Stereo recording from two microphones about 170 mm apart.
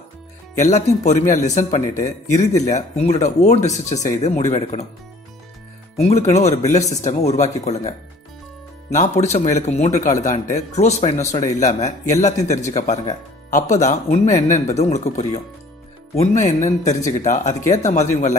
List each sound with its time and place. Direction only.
0.6 s speech: 45° left (ahead or behind)
5.9 s speech: 40° left (ahead or behind)
8.9 s speech: 40° left (ahead or behind)